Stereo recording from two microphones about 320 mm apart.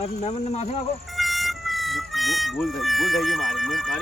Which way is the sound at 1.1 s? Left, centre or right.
Centre.